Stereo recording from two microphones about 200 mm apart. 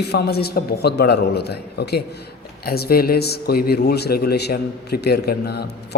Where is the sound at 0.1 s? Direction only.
55° left (ahead or behind).